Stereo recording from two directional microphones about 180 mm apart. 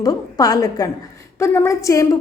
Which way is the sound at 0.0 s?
20° left (ahead or behind).